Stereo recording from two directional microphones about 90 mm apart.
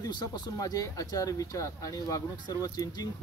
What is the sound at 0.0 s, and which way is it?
Speech, 45° left (ahead or behind).